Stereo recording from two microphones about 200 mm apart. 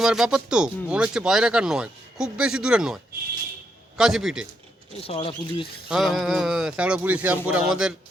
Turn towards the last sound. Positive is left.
turn(degrees=-5)  # may be behind; listen again after turning